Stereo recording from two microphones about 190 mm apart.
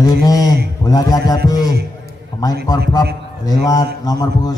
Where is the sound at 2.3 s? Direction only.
20° left (ahead or behind).